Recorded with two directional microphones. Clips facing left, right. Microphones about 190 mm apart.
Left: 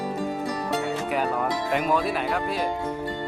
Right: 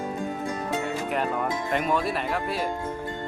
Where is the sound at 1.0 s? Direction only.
5° left (ahead or behind).